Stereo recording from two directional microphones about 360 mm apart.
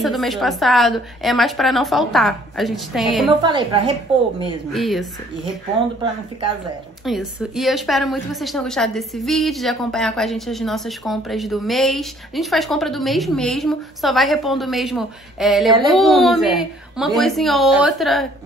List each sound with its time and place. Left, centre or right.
0.0 s a woman's voice: centre
3.4 s a woman's voice: centre
4.7 s a woman's voice: centre
7.1 s a woman's voice: centre